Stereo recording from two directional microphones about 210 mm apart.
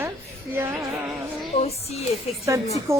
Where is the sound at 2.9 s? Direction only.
10° right (ahead or behind).